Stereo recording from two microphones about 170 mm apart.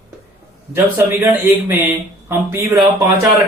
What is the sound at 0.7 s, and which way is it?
Speech, 15° right (ahead or behind).